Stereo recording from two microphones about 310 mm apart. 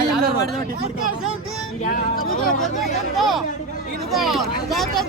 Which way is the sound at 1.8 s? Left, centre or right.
Left.